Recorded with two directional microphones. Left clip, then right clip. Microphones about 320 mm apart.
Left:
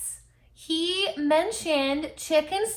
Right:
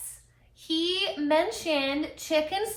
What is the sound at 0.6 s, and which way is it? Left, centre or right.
A woman's voice, left.